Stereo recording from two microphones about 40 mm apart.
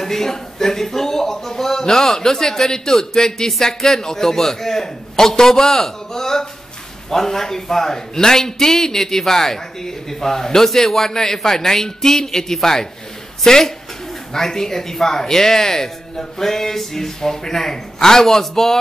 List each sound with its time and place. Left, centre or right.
0.0 s speech: centre